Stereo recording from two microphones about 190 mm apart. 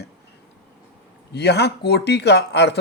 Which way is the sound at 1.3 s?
60° left (ahead or behind).